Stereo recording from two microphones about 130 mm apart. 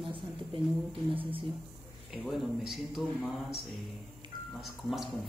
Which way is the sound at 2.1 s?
5° right (ahead or behind).